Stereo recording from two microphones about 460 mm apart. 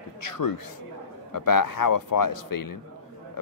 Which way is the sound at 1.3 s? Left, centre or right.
Left.